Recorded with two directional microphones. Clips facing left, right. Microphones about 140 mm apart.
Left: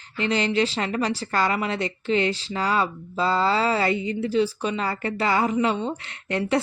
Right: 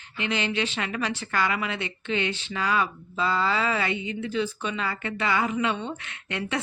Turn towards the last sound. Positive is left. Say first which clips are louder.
# left 6 dB
turn(degrees=35)  # may be behind; listen again after turning